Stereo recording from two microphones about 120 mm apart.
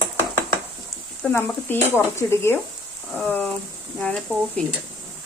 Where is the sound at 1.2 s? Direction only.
20° left (ahead or behind).